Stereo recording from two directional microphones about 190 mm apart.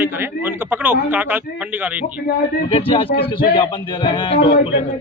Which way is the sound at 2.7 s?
30° left (ahead or behind).